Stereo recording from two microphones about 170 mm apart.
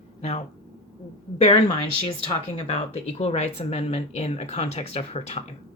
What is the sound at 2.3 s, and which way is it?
Speech, 35° left (ahead or behind).